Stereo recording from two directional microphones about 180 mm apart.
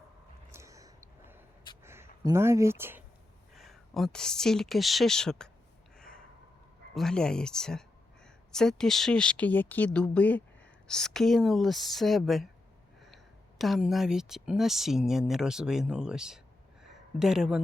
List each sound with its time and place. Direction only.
0.5 s a sound: 15° right (ahead or behind)
1.8 s speech: 15° right (ahead or behind)
3.5 s speech: centre (ahead or behind)
6.9 s speech: 5° left (ahead or behind)
13.6 s speech: centre (ahead or behind)
16.8 s a sound: 5° right (ahead or behind)